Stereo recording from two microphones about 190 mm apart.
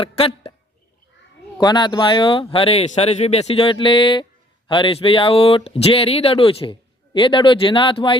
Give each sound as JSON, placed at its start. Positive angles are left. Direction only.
{"t": 0.0, "sound": "speech", "side_deg": 30}
{"t": 1.5, "sound": "speech", "side_deg": 25}